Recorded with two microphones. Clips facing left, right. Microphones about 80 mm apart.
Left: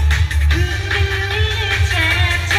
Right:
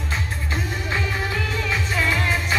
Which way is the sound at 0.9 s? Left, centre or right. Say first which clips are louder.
Left 3 dB; left.